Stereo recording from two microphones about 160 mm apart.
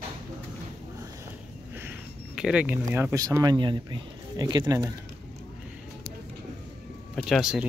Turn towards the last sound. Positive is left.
turn(degrees=-5)  # may be behind; listen again after turning